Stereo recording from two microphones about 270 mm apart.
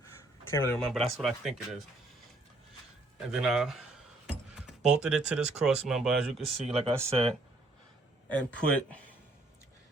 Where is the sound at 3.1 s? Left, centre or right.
Centre.